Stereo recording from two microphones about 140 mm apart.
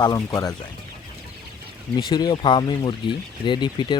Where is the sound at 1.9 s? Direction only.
30° left (ahead or behind).